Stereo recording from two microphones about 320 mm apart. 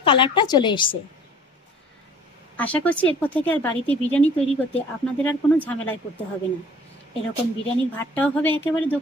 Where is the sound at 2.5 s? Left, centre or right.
Centre.